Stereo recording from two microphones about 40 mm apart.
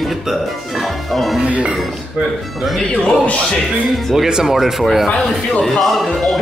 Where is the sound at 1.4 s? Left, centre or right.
Right.